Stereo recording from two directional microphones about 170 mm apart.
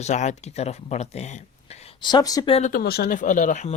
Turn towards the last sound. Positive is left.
turn(degrees=45)  # may be behind; listen again after turning